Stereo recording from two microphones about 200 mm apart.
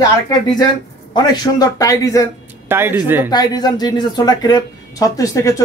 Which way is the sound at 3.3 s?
20° left (ahead or behind).